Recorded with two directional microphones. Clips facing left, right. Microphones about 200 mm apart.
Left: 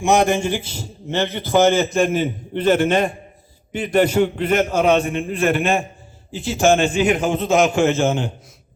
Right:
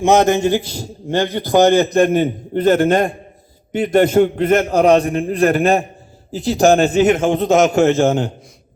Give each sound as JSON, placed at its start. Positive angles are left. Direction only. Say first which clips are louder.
{"t": 0.3, "sound": "a man's voice", "louder": "right 6 dB", "side_deg": -40}
{"t": 1.3, "sound": "a man's voice", "louder": "right 3 dB", "side_deg": -15}
{"t": 2.0, "sound": "a man's voice", "louder": "right 5 dB", "side_deg": -45}